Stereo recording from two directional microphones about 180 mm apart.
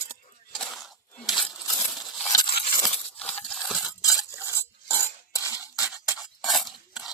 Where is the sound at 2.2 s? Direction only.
20° left (ahead or behind).